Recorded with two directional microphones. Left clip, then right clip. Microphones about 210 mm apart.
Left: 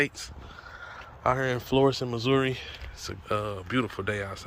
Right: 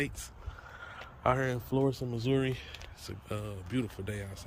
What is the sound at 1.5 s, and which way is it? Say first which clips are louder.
Speech: left 8 dB; centre (ahead or behind).